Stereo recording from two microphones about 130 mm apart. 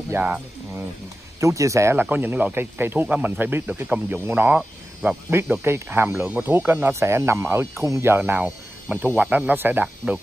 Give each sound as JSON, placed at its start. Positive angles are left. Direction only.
{"t": 0.1, "sound": "speech", "side_deg": -15}
{"t": 1.4, "sound": "speech", "side_deg": -25}